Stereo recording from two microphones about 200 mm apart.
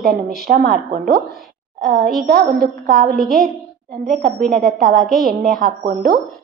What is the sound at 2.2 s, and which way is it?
Speech, 45° right (ahead or behind).